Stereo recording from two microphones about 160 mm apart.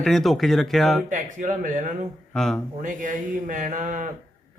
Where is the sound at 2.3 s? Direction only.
5° left (ahead or behind).